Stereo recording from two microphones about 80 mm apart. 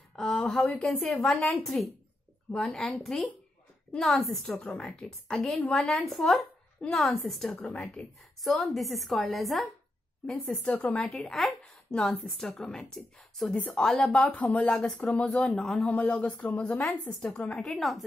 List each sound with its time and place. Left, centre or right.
0.1 s a sound: centre
0.6 s speech: centre
1.1 s speech: centre
7.7 s speech: centre
8.4 s speech: centre
10.4 s a woman's voice: centre
11.1 s speech: centre
15.9 s a woman's voice: centre
17.4 s speech: centre